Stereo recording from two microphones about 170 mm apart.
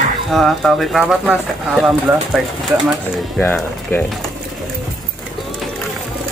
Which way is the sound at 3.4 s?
10° left (ahead or behind).